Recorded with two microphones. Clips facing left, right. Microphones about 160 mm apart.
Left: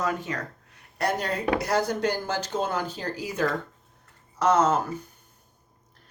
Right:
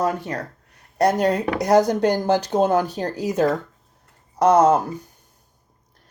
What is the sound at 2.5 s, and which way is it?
Speech, 40° right (ahead or behind).